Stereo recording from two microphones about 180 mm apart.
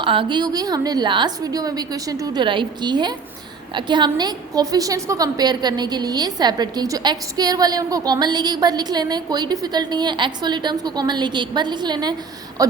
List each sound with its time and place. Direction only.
0.0 s a woman's voice: 30° right (ahead or behind)